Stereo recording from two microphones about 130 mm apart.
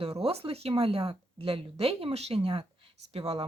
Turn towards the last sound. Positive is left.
turn(degrees=-50)  # may be behind; listen again after turning